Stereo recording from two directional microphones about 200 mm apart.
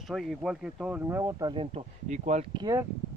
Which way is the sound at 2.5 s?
20° right (ahead or behind).